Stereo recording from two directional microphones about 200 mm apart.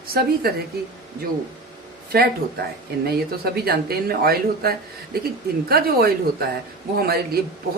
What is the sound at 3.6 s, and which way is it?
Speech, 50° right (ahead or behind).